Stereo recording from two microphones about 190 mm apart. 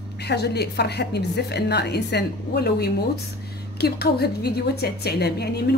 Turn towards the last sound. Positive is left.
turn(degrees=60)  # may be behind; listen again after turning